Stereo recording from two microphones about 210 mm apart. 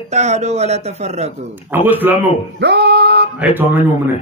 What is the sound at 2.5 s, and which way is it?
Speech, 50° right (ahead or behind).